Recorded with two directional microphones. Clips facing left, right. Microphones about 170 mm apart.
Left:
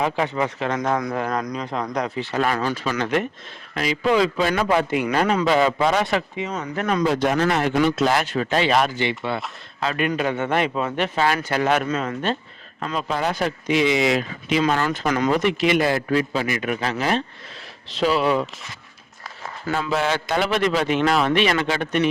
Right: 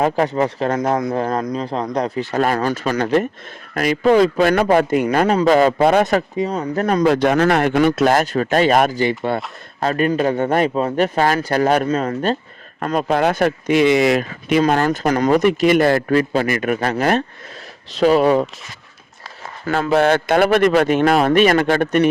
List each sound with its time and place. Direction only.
0.0 s a man's voice: 40° right (ahead or behind)
2.1 s speech: 45° right (ahead or behind)
3.8 s a man's voice: 50° right (ahead or behind)
7.0 s a man's voice: 70° right (ahead or behind); by 12.4 s 40° right (ahead or behind)
12.8 s speech: 55° right (ahead or behind)
19.6 s speech: 55° right (ahead or behind)